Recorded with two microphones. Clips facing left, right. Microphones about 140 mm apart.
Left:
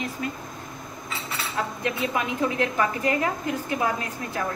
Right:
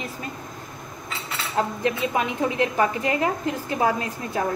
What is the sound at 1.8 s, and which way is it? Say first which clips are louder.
A woman's voice: right 3 dB; 25° right (ahead or behind).